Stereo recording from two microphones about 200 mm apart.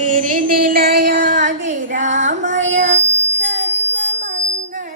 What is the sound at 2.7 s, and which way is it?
Child singing, 35° right (ahead or behind).